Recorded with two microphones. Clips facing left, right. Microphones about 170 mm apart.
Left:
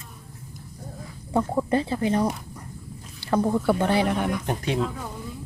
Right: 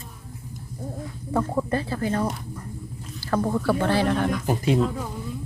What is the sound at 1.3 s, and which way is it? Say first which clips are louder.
Speech: left 1 dB; 15° left (ahead or behind).